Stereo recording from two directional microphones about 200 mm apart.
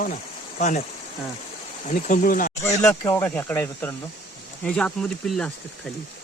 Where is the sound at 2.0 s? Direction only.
40° left (ahead or behind).